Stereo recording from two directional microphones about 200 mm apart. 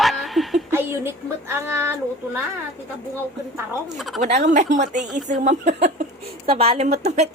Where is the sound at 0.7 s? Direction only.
10° right (ahead or behind).